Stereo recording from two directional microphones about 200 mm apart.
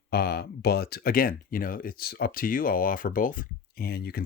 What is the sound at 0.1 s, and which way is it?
Speech, 50° left (ahead or behind).